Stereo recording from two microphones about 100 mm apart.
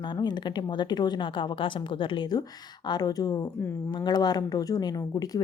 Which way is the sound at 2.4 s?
45° left (ahead or behind).